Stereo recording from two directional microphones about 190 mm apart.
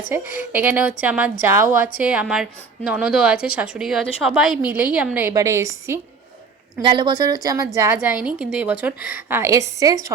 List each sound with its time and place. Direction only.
0.1 s a woman's voice: 15° right (ahead or behind)